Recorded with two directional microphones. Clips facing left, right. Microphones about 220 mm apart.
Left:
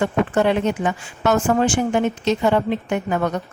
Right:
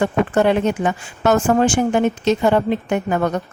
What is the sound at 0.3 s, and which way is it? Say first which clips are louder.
Speech: right 3 dB; 45° right (ahead or behind).